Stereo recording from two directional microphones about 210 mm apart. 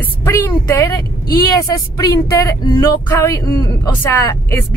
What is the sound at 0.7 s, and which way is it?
Speech, 15° left (ahead or behind).